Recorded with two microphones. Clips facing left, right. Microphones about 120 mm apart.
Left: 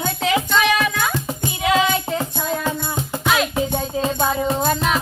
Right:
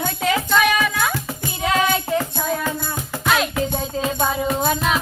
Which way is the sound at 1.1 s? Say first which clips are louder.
Left 2 dB; 25° left (ahead or behind).